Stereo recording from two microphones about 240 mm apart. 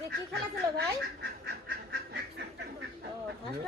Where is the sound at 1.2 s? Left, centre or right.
Right.